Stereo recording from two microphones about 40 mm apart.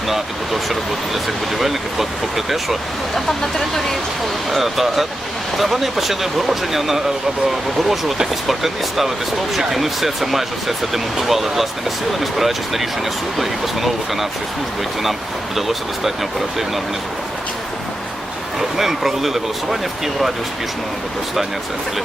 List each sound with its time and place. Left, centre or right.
0.1 s speech: centre
3.2 s speech: centre
4.5 s speech: centre
15.5 s speech: centre
18.8 s speech: centre